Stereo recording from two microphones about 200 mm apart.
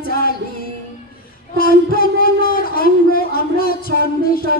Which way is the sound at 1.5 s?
45° left (ahead or behind).